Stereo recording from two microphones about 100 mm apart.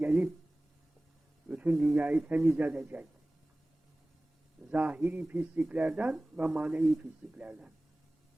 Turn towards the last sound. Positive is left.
turn(degrees=-15)  # may be behind; listen again after turning